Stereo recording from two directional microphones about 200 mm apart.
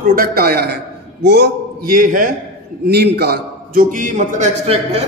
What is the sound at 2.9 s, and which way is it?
A man's voice, 55° right (ahead or behind).